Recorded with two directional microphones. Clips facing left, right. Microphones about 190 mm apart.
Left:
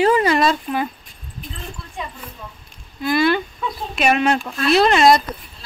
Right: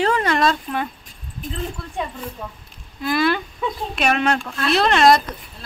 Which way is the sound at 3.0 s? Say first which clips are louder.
Left 2 dB; centre (ahead or behind).